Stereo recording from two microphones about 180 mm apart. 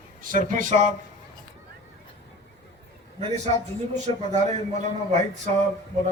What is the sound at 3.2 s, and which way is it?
A man's voice, 40° right (ahead or behind).